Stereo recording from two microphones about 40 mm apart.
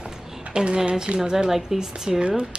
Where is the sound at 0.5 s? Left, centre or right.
Right.